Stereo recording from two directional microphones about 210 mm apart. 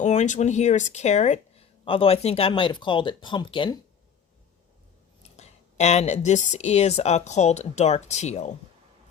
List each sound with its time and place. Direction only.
0.0 s speech: 35° left (ahead or behind)
5.4 s speech: 30° left (ahead or behind)